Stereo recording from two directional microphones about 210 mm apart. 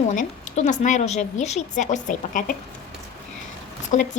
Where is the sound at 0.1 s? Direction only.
35° left (ahead or behind).